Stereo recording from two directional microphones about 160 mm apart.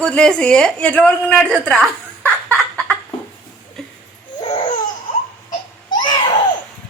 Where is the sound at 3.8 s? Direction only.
Centre (ahead or behind).